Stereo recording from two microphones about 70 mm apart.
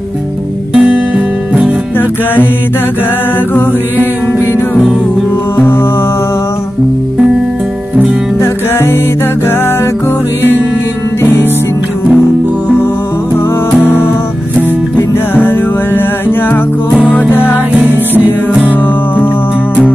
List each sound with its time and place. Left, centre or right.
0.7 s guitar: centre
8.4 s music: left
13.7 s music: left
17.7 s music: right